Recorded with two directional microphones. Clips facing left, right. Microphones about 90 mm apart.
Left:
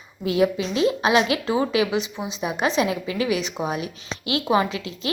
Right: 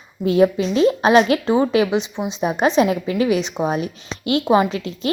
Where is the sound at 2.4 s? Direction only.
35° right (ahead or behind).